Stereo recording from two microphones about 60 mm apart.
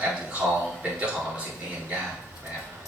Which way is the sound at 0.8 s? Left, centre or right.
Right.